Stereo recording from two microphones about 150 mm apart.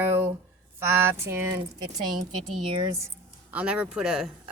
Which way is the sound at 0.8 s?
15° right (ahead or behind).